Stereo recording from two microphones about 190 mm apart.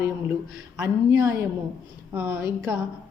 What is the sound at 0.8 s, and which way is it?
A woman's voice, 15° right (ahead or behind).